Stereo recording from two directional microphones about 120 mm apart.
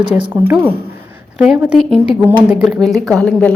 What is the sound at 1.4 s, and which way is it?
Speech, 5° right (ahead or behind).